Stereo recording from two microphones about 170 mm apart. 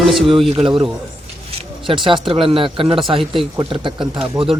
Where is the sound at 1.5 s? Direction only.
35° right (ahead or behind).